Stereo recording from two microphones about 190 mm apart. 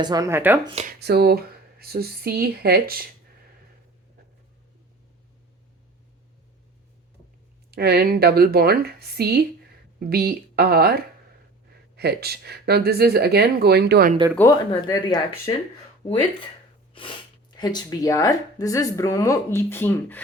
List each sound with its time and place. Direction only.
0.0 s speech: 20° right (ahead or behind)
0.6 s speech: 30° right (ahead or behind)
0.9 s speech: 60° right (ahead or behind)
7.7 s speech: 55° right (ahead or behind)
14.3 s speech: 15° left (ahead or behind)
16.9 s sneeze: 25° left (ahead or behind)
17.6 s speech: 20° left (ahead or behind)